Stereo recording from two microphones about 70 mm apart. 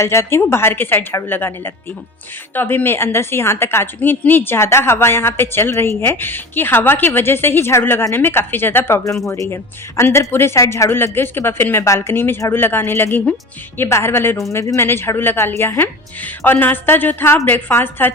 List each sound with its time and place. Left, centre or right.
0.0 s a woman's voice: left
10.8 s a woman's voice: left
14.5 s speech: left
14.8 s a woman's voice: left